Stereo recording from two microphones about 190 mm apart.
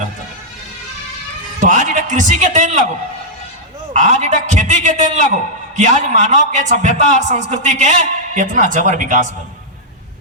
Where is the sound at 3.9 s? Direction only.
40° right (ahead or behind).